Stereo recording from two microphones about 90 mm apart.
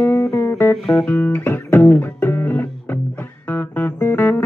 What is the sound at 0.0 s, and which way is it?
Music, 30° left (ahead or behind).